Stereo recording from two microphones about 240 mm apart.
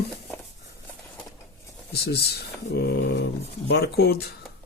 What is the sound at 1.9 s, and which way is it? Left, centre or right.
Speech, left.